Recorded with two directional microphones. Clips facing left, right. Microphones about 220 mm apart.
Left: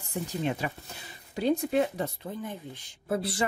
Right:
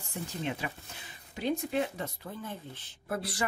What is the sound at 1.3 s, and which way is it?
Speech, 35° left (ahead or behind).